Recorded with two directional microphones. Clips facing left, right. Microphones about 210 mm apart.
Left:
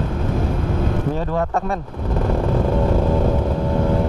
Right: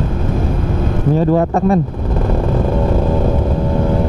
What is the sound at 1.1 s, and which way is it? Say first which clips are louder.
Speech: right 8 dB; 10° right (ahead or behind).